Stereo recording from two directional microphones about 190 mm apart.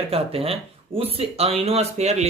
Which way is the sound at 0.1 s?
30° right (ahead or behind).